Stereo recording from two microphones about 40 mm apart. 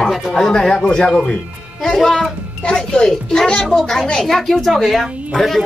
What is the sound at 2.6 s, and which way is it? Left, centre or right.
A woman's voice, centre.